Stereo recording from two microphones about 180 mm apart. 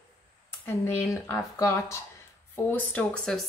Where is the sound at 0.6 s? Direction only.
15° left (ahead or behind).